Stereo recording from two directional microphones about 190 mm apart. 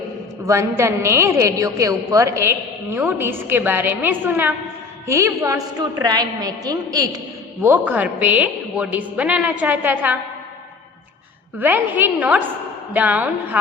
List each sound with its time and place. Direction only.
0.4 s a woman's voice: 15° right (ahead or behind)
7.6 s a woman's voice: 10° right (ahead or behind)
11.5 s a woman's voice: 10° right (ahead or behind)